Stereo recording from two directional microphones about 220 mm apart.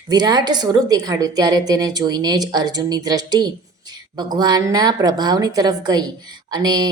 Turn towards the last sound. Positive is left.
turn(degrees=-20)  # may be behind; listen again after turning